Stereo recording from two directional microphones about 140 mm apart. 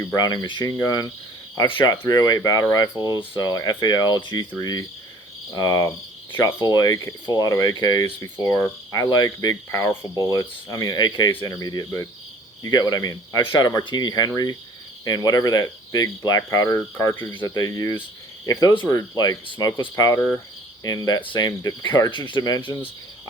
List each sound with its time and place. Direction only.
0.1 s speech: 25° left (ahead or behind)
2.9 s speech: 25° right (ahead or behind)
3.2 s speech: 30° left (ahead or behind)